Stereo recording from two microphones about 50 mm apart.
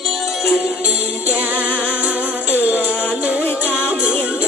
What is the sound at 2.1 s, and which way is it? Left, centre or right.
Music, right.